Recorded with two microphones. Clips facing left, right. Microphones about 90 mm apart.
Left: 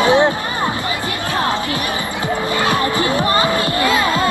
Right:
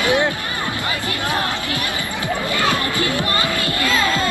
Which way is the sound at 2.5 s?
25° left (ahead or behind).